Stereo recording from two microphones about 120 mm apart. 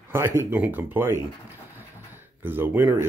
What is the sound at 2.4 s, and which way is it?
Speech, 15° right (ahead or behind).